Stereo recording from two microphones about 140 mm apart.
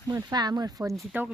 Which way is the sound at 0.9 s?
Centre (ahead or behind).